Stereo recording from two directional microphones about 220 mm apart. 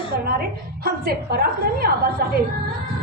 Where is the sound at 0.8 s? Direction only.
45° right (ahead or behind).